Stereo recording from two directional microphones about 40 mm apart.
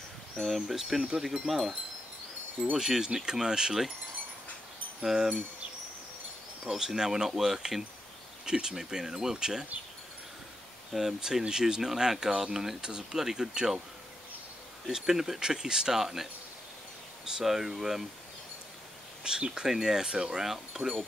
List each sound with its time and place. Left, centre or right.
0.4 s speech: centre
2.8 s speech: centre
5.0 s speech: centre
6.8 s speech: centre
10.9 s speech: centre
14.9 s speech: centre
19.2 s speech: right